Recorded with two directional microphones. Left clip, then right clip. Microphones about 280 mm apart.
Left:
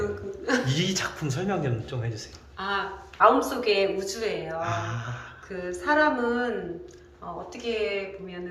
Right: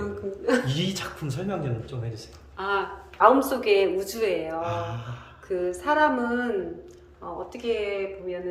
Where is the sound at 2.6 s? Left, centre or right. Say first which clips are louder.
Right 2 dB; right.